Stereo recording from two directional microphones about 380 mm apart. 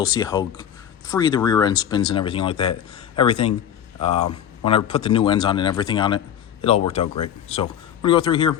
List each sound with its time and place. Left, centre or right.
0.1 s speech: centre